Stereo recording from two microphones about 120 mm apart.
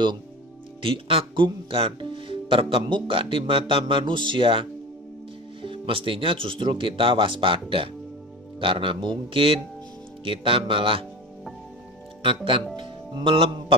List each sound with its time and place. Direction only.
0.8 s speech: 50° right (ahead or behind)
12.7 s speech: 45° right (ahead or behind)